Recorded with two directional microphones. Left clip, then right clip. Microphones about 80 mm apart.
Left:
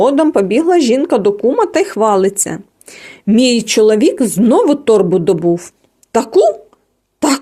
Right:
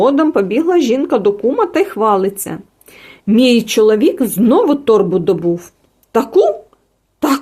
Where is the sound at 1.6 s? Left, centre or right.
Left.